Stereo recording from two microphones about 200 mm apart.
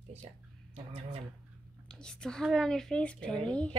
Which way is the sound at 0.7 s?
30° right (ahead or behind).